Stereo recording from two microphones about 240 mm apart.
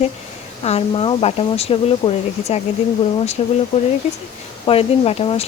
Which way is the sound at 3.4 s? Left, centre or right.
Left.